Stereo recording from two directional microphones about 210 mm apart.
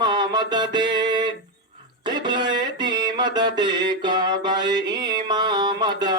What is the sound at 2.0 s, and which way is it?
Mantra, 20° right (ahead or behind).